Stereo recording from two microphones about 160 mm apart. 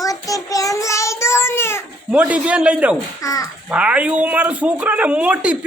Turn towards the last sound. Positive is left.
turn(degrees=-10)  # may be behind; listen again after turning